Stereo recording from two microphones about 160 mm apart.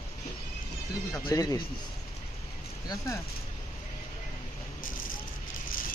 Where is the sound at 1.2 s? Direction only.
20° left (ahead or behind).